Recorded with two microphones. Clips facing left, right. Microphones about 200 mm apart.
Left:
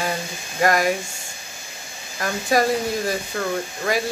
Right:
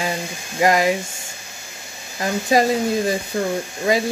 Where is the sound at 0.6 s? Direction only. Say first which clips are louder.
Right 2 dB; 20° right (ahead or behind).